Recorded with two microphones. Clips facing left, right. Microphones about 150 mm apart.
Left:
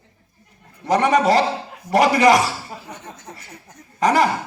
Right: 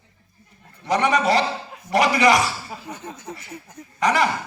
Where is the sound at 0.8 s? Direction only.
45° left (ahead or behind).